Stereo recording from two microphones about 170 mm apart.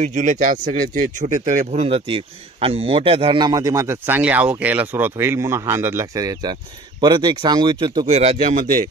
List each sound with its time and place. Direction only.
0.0 s speech: 45° right (ahead or behind); by 8.1 s 25° right (ahead or behind)
8.1 s speech: 40° right (ahead or behind)